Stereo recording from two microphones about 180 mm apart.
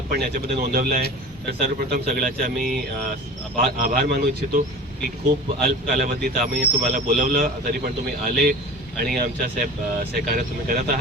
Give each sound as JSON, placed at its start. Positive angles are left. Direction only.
{"t": 0.3, "sound": "speech", "side_deg": -55}